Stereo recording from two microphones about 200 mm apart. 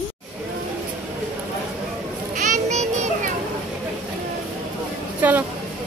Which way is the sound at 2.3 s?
40° right (ahead or behind).